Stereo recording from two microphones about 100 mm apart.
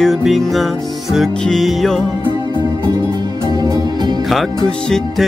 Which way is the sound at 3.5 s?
40° right (ahead or behind).